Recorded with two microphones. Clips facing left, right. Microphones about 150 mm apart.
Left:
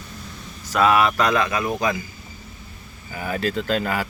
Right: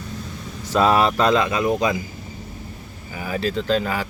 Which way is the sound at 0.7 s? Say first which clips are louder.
Right 1 dB; 30° right (ahead or behind).